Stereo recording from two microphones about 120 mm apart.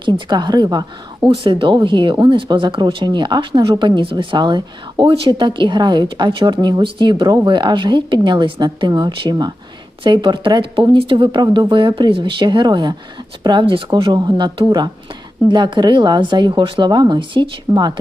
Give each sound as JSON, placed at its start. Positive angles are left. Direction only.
{"t": 0.0, "sound": "speech", "side_deg": -40}